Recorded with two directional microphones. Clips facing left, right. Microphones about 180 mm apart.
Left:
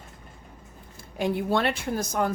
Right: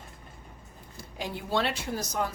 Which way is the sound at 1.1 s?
55° left (ahead or behind).